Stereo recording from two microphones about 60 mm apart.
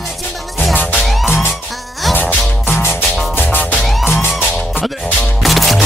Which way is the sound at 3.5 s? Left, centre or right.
Left.